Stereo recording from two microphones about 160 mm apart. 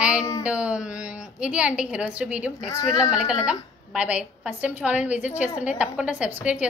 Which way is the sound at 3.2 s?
5° right (ahead or behind).